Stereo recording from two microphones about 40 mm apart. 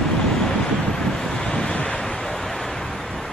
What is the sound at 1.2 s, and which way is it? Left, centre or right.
Waves, centre.